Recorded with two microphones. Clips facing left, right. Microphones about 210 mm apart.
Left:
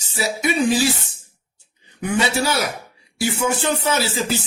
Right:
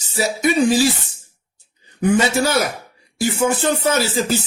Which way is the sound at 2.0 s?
45° right (ahead or behind).